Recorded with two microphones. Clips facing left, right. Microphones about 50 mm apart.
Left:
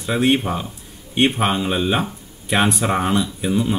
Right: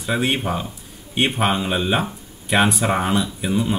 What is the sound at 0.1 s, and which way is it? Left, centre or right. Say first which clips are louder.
Speech: left 3 dB; centre.